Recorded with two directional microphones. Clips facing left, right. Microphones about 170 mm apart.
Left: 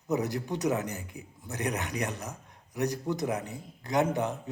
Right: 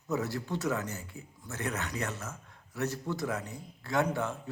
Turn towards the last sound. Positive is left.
turn(degrees=20)  # may be behind; listen again after turning